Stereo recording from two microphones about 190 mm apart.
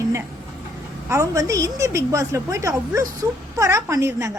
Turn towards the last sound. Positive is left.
turn(degrees=-15)  # may be behind; listen again after turning